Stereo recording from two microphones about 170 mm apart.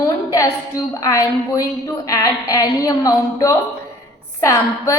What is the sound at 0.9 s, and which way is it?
A woman's voice, 20° left (ahead or behind).